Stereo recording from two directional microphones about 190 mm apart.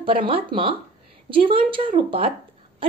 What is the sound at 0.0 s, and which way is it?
A woman's voice, 30° right (ahead or behind).